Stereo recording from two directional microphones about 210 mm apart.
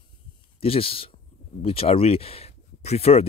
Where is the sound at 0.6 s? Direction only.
25° left (ahead or behind).